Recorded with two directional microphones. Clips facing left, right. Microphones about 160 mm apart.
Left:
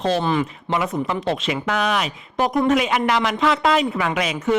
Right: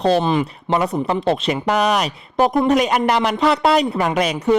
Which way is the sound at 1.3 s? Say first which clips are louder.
Right 6 dB; 40° right (ahead or behind).